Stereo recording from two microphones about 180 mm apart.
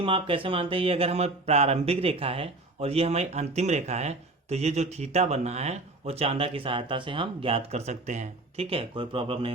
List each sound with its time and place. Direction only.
0.0 s speech: 30° right (ahead or behind)